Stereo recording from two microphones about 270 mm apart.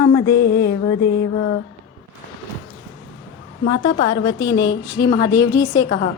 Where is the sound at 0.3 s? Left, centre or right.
Left.